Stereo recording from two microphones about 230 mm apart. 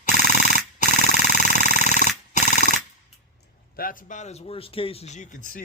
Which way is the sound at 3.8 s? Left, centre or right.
Left.